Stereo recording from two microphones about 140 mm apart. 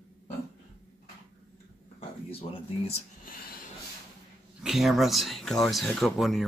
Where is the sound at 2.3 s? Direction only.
45° left (ahead or behind).